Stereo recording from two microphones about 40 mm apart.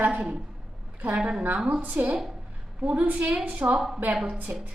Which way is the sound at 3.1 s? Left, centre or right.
Right.